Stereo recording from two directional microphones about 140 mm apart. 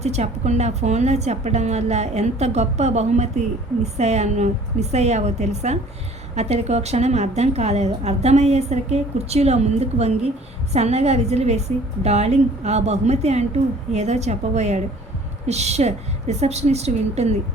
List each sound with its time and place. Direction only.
0.0 s a woman's voice: 50° right (ahead or behind)